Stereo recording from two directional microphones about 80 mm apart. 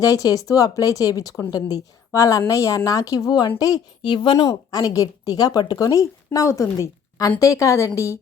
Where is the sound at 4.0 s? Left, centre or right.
Left.